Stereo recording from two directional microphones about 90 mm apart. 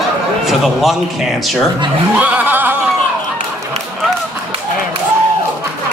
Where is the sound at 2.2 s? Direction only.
20° right (ahead or behind).